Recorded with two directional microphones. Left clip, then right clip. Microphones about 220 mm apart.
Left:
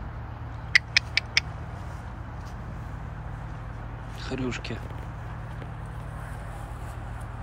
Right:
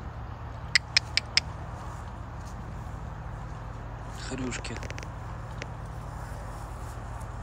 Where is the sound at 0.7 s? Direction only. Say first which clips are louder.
Left 3 dB; 10° right (ahead or behind).